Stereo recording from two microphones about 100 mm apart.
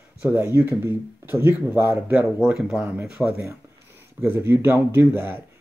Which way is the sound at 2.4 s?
5° right (ahead or behind).